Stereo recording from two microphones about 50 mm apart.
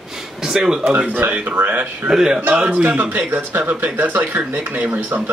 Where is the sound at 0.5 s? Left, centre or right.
Centre.